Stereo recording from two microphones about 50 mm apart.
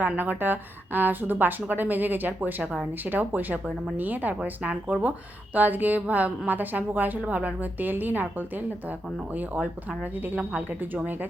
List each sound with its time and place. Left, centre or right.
0.2 s a woman's voice: right